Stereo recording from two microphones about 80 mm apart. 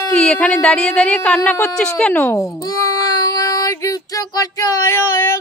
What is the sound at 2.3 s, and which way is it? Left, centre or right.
Child singing, left.